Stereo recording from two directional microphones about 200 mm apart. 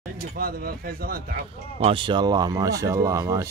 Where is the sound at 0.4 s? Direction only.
45° right (ahead or behind).